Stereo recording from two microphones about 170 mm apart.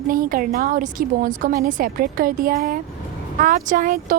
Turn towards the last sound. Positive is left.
turn(degrees=-50)  # may be behind; listen again after turning